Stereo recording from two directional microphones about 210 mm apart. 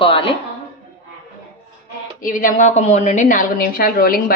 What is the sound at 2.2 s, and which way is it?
A woman's voice, 40° left (ahead or behind).